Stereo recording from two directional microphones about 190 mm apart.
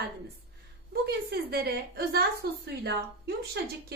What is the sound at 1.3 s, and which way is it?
A woman's voice, 55° right (ahead or behind).